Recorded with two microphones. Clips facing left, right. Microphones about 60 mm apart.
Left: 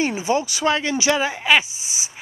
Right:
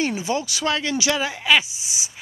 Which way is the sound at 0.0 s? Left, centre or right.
Centre.